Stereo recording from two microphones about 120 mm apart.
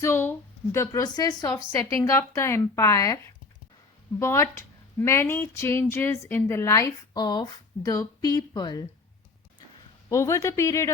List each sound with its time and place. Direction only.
0.0 s a woman's voice: 20° left (ahead or behind)
4.2 s a woman's voice: 25° left (ahead or behind)
10.1 s a woman's voice: 25° left (ahead or behind)